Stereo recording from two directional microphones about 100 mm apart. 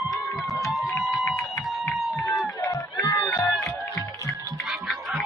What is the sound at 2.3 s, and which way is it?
Run, 35° left (ahead or behind).